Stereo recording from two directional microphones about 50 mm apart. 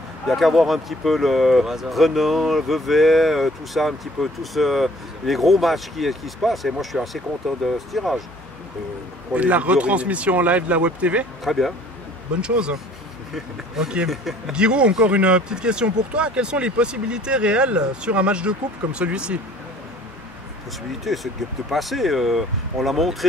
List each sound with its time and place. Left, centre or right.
0.3 s speech: centre
9.3 s speech: right
11.4 s speech: centre
12.4 s speech: centre
14.6 s speech: centre
21.0 s speech: centre